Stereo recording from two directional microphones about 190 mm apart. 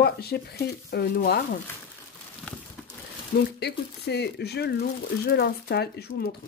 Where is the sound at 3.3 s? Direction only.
60° left (ahead or behind).